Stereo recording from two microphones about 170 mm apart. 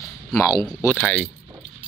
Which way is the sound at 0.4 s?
20° left (ahead or behind).